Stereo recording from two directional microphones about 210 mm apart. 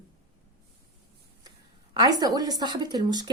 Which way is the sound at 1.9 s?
20° right (ahead or behind).